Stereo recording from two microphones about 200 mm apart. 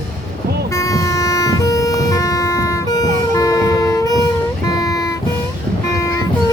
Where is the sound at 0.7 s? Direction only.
15° left (ahead or behind).